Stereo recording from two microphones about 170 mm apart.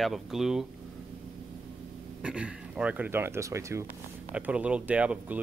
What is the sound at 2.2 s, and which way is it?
Speech, 5° right (ahead or behind).